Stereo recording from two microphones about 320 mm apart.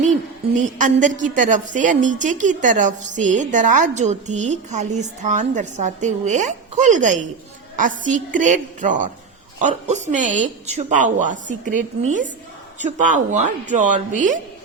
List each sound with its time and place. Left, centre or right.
0.8 s a woman's voice: right
12.8 s a woman's voice: right